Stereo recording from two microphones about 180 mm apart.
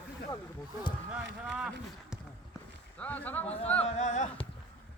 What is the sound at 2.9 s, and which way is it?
Speech, 10° left (ahead or behind).